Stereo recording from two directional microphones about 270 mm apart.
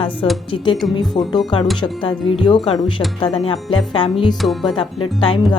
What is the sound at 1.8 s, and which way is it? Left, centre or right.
Speech, centre.